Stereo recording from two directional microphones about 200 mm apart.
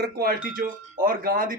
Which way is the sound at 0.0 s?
50° right (ahead or behind).